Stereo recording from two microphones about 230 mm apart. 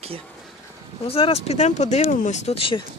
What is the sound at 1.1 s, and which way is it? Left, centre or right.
Speech, left.